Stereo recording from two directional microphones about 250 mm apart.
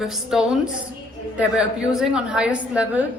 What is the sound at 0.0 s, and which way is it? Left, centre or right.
A woman's voice, centre.